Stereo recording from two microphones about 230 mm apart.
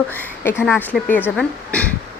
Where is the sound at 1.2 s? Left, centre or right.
Centre.